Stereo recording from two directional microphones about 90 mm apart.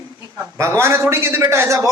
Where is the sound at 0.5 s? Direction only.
35° right (ahead or behind).